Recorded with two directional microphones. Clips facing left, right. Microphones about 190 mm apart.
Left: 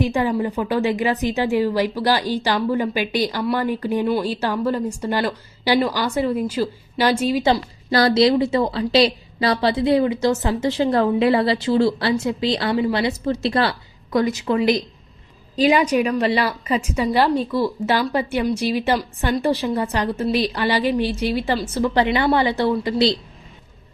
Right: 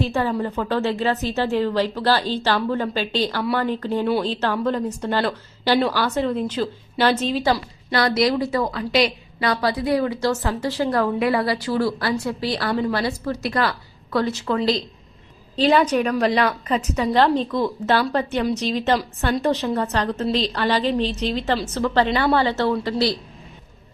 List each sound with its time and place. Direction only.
0.0 s a woman's voice: 15° left (ahead or behind)
7.9 s a woman's voice: 30° left (ahead or behind)
14.1 s a woman's voice: 15° left (ahead or behind)